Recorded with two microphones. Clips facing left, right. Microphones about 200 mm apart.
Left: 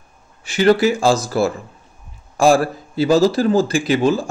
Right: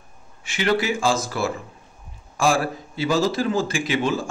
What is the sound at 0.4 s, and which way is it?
A man's voice, 35° left (ahead or behind).